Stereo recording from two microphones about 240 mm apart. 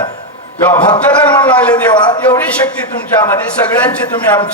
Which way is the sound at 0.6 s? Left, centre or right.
Centre.